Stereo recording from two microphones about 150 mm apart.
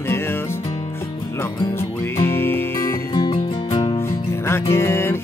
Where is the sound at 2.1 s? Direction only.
15° left (ahead or behind).